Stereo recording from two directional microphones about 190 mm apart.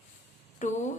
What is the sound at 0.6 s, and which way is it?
Speech, 40° left (ahead or behind).